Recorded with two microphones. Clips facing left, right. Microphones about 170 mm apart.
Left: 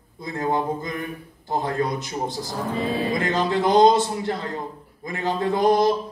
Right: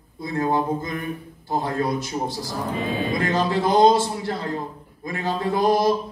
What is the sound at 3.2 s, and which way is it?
Speech, 20° left (ahead or behind).